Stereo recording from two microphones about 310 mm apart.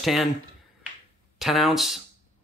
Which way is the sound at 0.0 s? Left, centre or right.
Centre.